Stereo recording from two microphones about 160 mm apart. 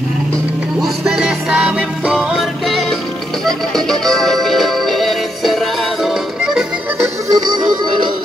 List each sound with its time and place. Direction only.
0.7 s music: centre (ahead or behind)
7.0 s music: 25° right (ahead or behind)